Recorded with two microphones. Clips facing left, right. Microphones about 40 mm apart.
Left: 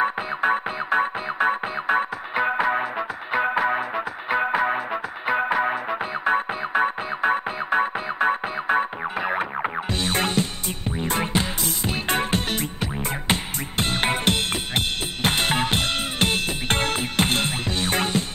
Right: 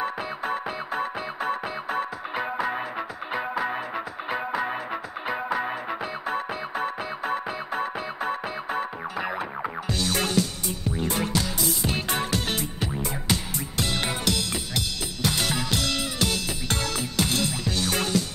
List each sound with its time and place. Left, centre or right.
0.0 s music: left
5.9 s music: left